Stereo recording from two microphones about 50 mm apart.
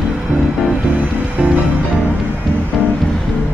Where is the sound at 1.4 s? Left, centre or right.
Centre.